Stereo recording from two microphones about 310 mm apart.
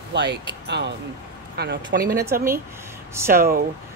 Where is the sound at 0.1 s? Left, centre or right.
Right.